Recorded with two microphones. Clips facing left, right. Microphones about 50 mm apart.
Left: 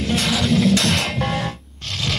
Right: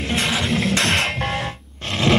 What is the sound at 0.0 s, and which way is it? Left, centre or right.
Music, centre.